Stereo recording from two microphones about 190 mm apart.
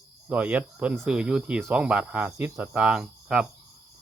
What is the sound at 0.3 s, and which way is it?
Speech, 10° right (ahead or behind).